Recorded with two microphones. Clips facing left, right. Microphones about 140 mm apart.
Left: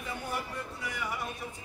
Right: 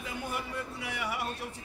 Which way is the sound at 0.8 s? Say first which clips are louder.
Right 1 dB; 65° right (ahead or behind).